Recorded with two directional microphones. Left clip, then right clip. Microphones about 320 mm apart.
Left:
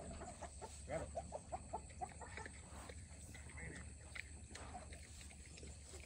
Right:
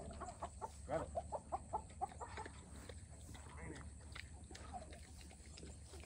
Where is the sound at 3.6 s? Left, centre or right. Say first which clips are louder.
Even; centre.